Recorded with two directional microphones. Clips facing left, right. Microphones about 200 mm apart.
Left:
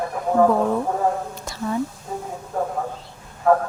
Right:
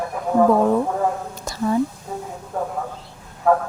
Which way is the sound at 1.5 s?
40° right (ahead or behind).